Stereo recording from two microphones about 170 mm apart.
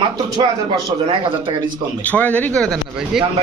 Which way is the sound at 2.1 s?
10° left (ahead or behind).